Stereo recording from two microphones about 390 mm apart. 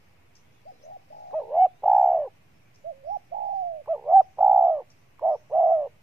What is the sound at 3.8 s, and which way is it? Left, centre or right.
Bird, centre.